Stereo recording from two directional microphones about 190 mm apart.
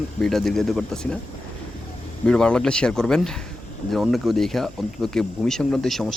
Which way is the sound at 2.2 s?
5° left (ahead or behind).